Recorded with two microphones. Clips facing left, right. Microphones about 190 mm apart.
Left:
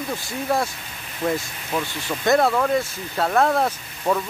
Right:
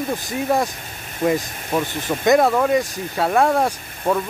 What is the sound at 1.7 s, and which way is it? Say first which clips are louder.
Speech: right 4 dB; 45° right (ahead or behind).